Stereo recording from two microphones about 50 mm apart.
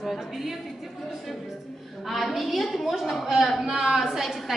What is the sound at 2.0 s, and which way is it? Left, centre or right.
A woman's voice, centre.